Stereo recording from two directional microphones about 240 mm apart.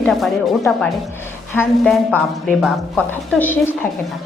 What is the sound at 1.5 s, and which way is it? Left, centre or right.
A woman's voice, centre.